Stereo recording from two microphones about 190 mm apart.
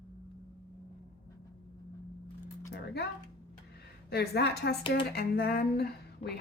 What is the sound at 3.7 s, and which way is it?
A woman's voice, 55° left (ahead or behind).